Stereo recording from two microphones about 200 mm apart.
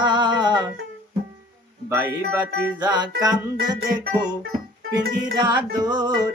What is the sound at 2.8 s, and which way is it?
Music, 20° right (ahead or behind).